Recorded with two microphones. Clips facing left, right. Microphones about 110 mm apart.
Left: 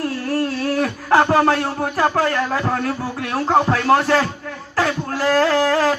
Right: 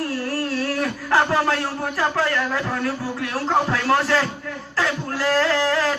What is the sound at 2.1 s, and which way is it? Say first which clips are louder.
Speech: left 3 dB; 45° left (ahead or behind).